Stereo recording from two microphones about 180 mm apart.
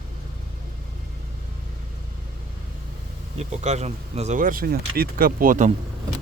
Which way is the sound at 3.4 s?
40° right (ahead or behind).